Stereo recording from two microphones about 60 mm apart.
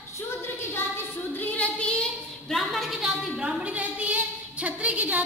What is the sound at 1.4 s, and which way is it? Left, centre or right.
Female singing, left.